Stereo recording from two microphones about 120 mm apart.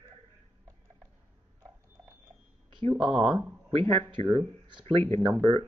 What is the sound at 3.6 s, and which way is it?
Speech, 50° right (ahead or behind).